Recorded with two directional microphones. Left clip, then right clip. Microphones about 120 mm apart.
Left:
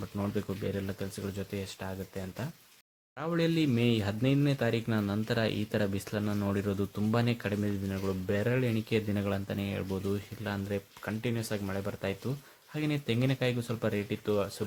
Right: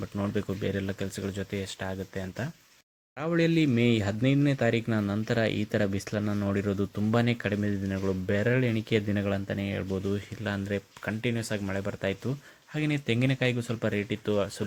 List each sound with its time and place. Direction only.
0.2 s speech: 20° right (ahead or behind)